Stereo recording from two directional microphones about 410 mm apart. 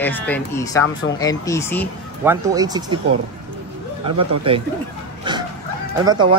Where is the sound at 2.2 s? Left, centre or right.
Centre.